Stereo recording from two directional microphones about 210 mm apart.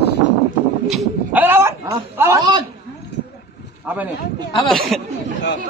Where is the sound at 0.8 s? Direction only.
5° right (ahead or behind).